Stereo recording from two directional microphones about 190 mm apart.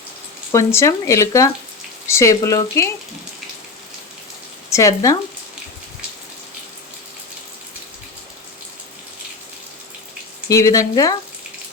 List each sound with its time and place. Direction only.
0.5 s speech: 15° left (ahead or behind)
4.7 s speech: 15° left (ahead or behind)
10.5 s speech: 20° left (ahead or behind)